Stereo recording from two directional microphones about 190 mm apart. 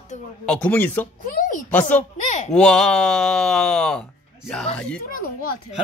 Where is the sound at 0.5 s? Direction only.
5° left (ahead or behind).